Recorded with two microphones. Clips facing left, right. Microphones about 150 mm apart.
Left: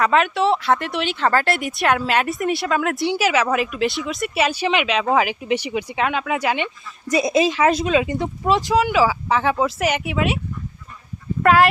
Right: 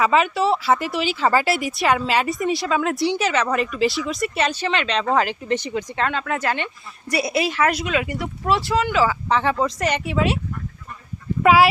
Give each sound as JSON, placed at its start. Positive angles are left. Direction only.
{"t": 0.0, "sound": "speech", "side_deg": 0}
{"t": 11.4, "sound": "speech", "side_deg": -5}